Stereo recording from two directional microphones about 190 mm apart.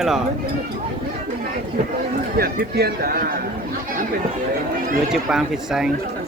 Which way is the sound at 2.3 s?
50° right (ahead or behind).